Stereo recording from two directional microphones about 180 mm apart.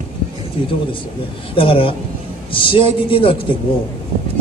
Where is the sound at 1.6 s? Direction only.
30° left (ahead or behind).